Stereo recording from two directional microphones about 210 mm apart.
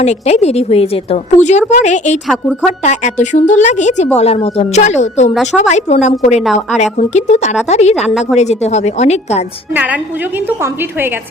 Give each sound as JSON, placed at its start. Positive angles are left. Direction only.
{"t": 0.0, "sound": "a woman's voice", "side_deg": 30}
{"t": 2.2, "sound": "a woman's voice", "side_deg": 0}
{"t": 2.8, "sound": "a woman's voice", "side_deg": 35}
{"t": 5.3, "sound": "a woman's voice", "side_deg": 0}
{"t": 5.5, "sound": "a woman's voice", "side_deg": 35}
{"t": 6.4, "sound": "a woman's voice", "side_deg": 0}
{"t": 6.9, "sound": "a woman's voice", "side_deg": 35}
{"t": 8.0, "sound": "a woman's voice", "side_deg": 0}
{"t": 8.4, "sound": "a woman's voice", "side_deg": 30}
{"t": 9.7, "sound": "a woman's voice", "side_deg": -5}